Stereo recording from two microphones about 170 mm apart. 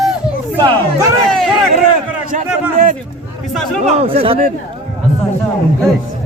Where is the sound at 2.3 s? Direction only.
50° right (ahead or behind).